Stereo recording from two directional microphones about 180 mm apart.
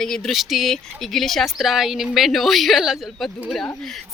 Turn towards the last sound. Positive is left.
turn(degrees=0)  # may be behind; listen again after turning